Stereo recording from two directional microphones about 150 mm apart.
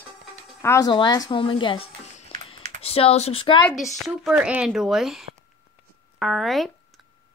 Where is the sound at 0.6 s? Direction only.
20° left (ahead or behind); by 3.6 s 35° left (ahead or behind).